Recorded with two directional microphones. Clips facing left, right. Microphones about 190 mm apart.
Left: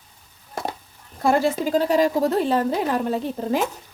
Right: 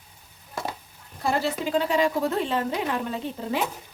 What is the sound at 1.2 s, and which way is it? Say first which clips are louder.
A woman's voice: left 6 dB; 50° left (ahead or behind).